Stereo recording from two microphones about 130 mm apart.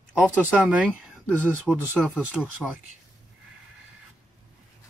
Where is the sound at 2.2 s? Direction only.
10° right (ahead or behind).